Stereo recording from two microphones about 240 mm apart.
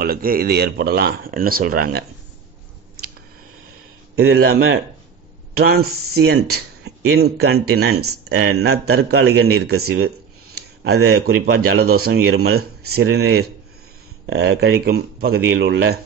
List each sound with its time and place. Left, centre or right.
0.0 s speech: right
4.1 s speech: right